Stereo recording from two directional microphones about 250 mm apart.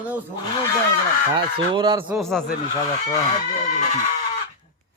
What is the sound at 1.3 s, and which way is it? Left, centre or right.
Speech, centre.